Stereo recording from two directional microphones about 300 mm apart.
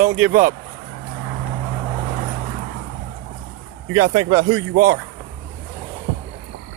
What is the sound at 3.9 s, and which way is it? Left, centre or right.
Speech, right.